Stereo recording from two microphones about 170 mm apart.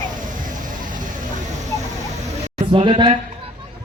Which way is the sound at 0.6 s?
50° right (ahead or behind).